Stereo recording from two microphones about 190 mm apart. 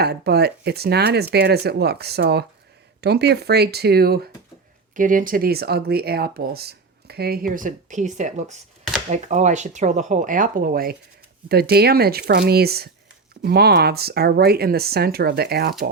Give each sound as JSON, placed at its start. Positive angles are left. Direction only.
{"t": 0.0, "sound": "speech", "side_deg": -55}
{"t": 4.9, "sound": "speech", "side_deg": -45}